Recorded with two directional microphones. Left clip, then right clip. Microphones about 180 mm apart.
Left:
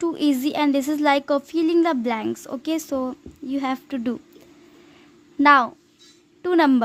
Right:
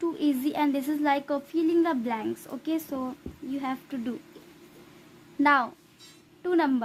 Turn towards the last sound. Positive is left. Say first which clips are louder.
# left 7 dB
turn(degrees=35)  # may be behind; listen again after turning